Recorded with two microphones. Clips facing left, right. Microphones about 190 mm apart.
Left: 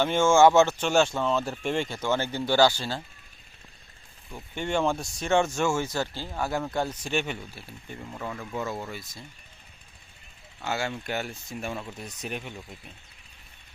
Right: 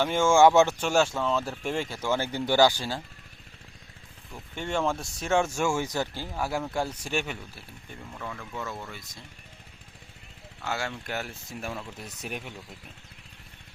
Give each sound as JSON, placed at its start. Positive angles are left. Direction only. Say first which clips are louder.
{"t": 0.0, "sound": "speech", "louder": "left 1 dB", "side_deg": -10}
{"t": 4.4, "sound": "speech", "louder": "left 2 dB", "side_deg": 0}
{"t": 8.1, "sound": "speech", "louder": "left 4 dB", "side_deg": 20}
{"t": 10.6, "sound": "speech", "louder": "left 2 dB", "side_deg": 0}